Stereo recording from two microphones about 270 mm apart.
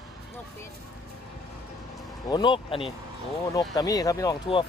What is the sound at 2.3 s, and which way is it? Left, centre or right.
Speech, centre.